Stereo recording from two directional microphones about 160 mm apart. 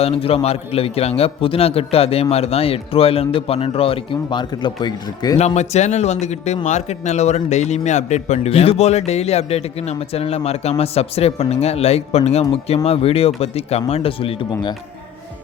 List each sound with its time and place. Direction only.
0.0 s a man's voice: 40° left (ahead or behind)
5.4 s a man's voice: 45° left (ahead or behind)